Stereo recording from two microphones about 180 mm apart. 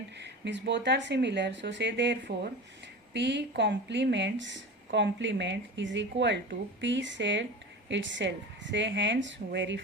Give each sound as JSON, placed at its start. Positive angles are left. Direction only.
{"t": 0.2, "sound": "speech", "side_deg": -70}